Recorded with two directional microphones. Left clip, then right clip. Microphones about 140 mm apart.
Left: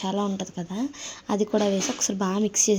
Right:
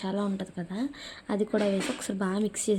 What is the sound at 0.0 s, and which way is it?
A woman's voice, 20° left (ahead or behind).